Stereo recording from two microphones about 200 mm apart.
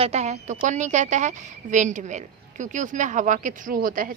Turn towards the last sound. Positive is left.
turn(degrees=-45)  # may be behind; listen again after turning